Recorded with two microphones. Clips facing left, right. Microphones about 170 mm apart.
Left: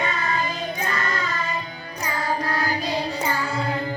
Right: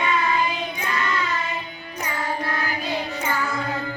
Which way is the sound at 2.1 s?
35° left (ahead or behind).